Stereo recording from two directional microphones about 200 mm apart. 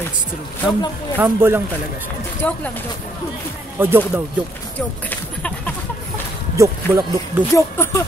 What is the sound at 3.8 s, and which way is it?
Speech, 10° right (ahead or behind).